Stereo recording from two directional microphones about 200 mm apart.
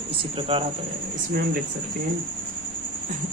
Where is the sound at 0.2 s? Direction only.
25° right (ahead or behind).